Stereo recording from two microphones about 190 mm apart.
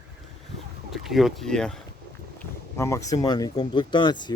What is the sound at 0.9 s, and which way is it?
Speech, centre (ahead or behind).